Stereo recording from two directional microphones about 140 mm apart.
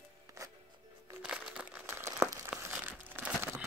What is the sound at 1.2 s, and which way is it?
Crumpling, 5° right (ahead or behind).